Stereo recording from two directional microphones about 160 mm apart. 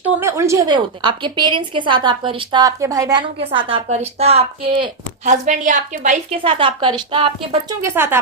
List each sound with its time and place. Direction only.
0.0 s a sound: 15° right (ahead or behind)
0.7 s a woman's voice: 30° right (ahead or behind)
3.3 s a woman's voice: 35° right (ahead or behind)
5.2 s a woman's voice: 50° right (ahead or behind)
6.3 s a woman's voice: 35° right (ahead or behind)
7.8 s speech: 15° right (ahead or behind)